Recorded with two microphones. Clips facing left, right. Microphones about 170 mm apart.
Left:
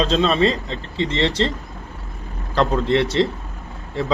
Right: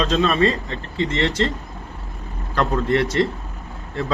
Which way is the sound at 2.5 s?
30° left (ahead or behind).